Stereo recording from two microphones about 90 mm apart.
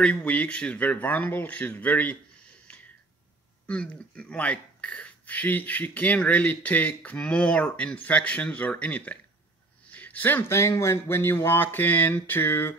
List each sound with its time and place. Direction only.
0.0 s speech: 15° left (ahead or behind)
3.6 s speech: 15° left (ahead or behind)